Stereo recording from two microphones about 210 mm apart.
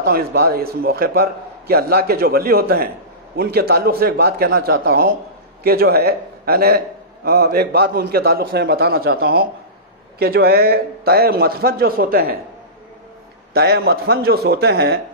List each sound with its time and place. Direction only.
0.0 s a man's voice: 45° right (ahead or behind)
13.5 s a man's voice: 50° right (ahead or behind)